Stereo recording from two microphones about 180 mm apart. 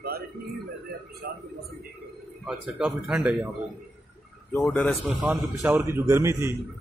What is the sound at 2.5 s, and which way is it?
Speech, 5° right (ahead or behind).